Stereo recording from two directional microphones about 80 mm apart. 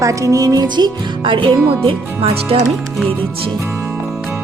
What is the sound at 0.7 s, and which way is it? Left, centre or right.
Music, right.